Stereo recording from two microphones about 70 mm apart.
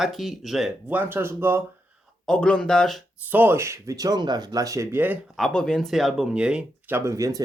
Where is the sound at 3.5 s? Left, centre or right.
Right.